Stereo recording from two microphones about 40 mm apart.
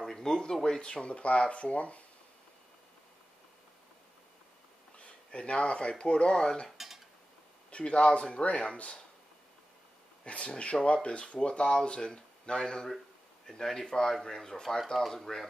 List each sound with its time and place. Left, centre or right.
0.0 s speech: centre; by 2.0 s left
4.9 s speech: left
7.7 s speech: left
10.2 s speech: left; by 15.4 s centre